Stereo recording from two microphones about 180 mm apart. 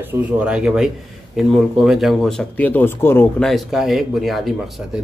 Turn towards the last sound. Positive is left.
turn(degrees=0)  # may be behind; listen again after turning